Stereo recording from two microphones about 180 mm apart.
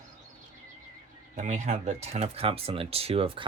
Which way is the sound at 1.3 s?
40° right (ahead or behind).